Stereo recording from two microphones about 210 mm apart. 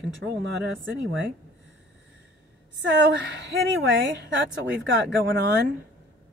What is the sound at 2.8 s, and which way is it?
A woman's voice, 60° right (ahead or behind).